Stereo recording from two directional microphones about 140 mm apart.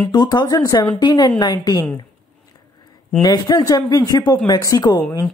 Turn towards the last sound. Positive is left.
turn(degrees=10)  # may be behind; listen again after turning